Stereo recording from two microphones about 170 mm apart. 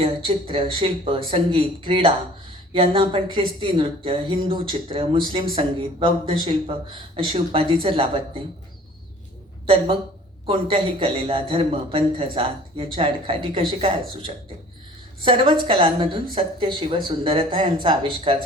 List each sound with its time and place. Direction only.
0.0 s a man's voice: 30° right (ahead or behind)
9.6 s a man's voice: 35° right (ahead or behind)